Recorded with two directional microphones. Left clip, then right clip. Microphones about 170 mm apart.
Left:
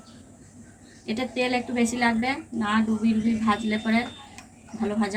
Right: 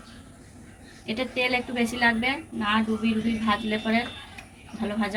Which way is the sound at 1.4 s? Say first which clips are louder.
Left 1 dB; 20° right (ahead or behind).